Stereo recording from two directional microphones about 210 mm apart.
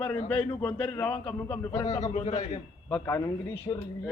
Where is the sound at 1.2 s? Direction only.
5° left (ahead or behind).